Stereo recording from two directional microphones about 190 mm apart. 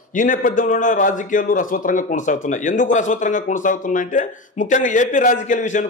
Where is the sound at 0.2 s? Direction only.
45° left (ahead or behind).